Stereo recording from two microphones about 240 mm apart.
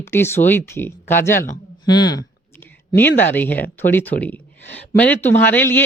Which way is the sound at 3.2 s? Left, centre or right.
Centre.